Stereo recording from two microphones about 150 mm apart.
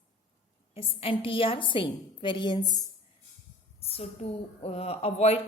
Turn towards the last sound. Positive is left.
turn(degrees=45)  # may be behind; listen again after turning